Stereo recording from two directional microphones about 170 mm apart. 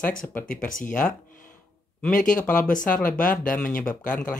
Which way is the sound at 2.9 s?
10° left (ahead or behind).